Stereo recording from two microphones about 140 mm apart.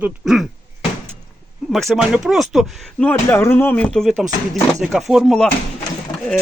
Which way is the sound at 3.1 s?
15° left (ahead or behind).